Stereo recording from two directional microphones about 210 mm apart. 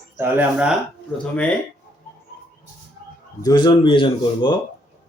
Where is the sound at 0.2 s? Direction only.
5° right (ahead or behind).